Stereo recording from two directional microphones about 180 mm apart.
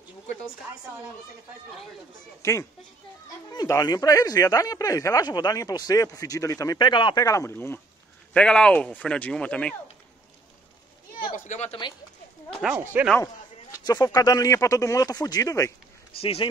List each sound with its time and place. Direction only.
2.4 s speech: 15° left (ahead or behind)
11.1 s a sound: 50° left (ahead or behind)
12.6 s speech: 10° right (ahead or behind)
13.8 s speech: 20° left (ahead or behind)
16.2 s speech: 30° left (ahead or behind)